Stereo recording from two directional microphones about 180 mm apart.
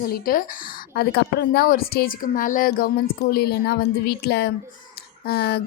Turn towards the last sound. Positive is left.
turn(degrees=65)  # may be behind; listen again after turning